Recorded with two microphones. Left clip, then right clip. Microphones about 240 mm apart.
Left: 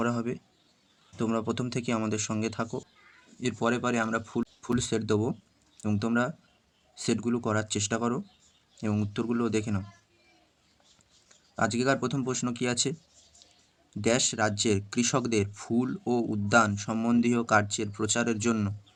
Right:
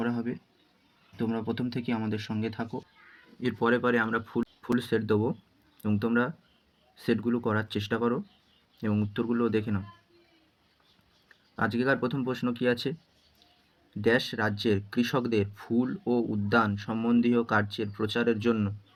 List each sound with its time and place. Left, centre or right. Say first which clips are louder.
1.1 s speech: left 2 dB; left
11.5 s speech: even; centre
14.0 s speech: even; left